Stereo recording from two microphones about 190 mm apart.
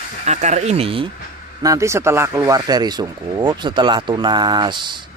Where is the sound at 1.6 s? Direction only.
15° right (ahead or behind).